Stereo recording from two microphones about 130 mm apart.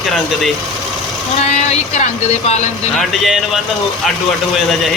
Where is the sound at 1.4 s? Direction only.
60° left (ahead or behind).